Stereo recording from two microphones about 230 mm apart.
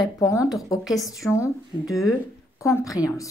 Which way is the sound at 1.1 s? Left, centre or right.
Centre.